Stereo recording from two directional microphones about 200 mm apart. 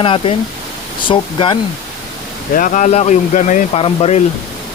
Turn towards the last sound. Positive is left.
turn(degrees=30)  # may be behind; listen again after turning